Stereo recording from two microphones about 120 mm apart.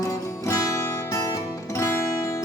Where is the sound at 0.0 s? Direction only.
30° left (ahead or behind).